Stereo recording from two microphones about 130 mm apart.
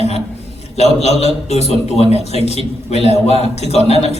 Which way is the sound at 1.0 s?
55° left (ahead or behind).